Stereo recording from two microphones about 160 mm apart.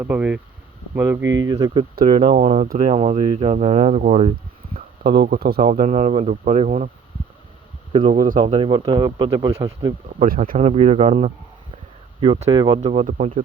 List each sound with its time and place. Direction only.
0.0 s speech: 10° right (ahead or behind)
1.4 s speech: 25° right (ahead or behind)
2.1 s speech: 40° right (ahead or behind)
4.7 s speech: 80° right
5.6 s speech: 45° right (ahead or behind)
8.4 s speech: 35° right (ahead or behind)
10.2 s speech: 60° right (ahead or behind)
10.6 s speech: 40° right (ahead or behind)